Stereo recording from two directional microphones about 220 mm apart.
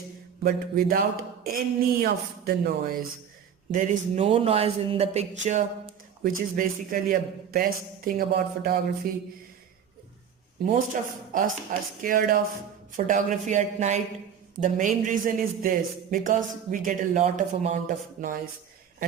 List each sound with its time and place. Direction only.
0.4 s a man's voice: 40° right (ahead or behind)
10.9 s a man's voice: 35° right (ahead or behind)